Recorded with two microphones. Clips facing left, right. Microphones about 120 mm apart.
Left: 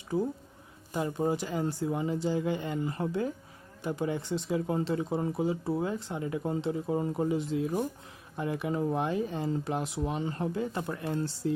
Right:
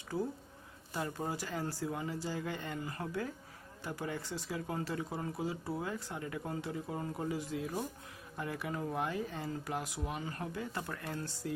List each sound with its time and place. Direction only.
0.1 s speech: 20° left (ahead or behind)